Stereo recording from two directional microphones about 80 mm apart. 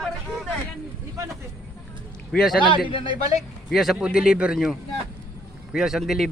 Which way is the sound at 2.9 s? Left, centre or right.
Left.